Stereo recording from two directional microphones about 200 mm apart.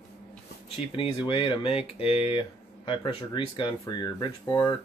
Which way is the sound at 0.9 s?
25° left (ahead or behind).